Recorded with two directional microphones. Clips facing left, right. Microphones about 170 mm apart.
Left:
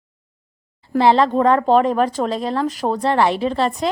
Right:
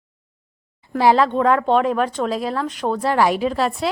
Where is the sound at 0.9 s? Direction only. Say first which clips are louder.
Left 1 dB; 10° right (ahead or behind).